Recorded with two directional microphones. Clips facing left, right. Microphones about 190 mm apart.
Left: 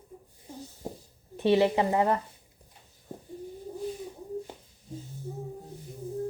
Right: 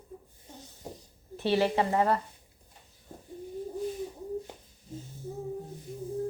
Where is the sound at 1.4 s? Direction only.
20° left (ahead or behind).